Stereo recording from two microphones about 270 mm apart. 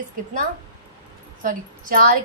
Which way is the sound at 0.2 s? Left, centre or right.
Right.